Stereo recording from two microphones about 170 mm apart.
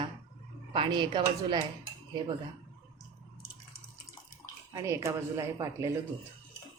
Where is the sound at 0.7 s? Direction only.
25° right (ahead or behind).